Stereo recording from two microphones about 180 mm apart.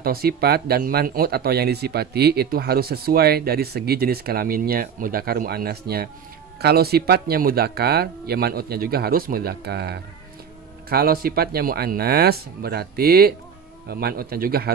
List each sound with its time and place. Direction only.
0.0 s speech: 55° right (ahead or behind)